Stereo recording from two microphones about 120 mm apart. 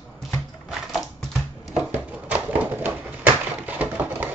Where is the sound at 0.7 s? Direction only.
Centre (ahead or behind).